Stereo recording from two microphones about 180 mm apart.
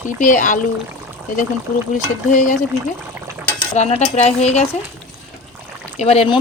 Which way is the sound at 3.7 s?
40° left (ahead or behind).